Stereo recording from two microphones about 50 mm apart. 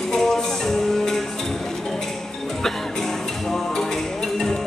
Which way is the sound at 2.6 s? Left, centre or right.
Centre.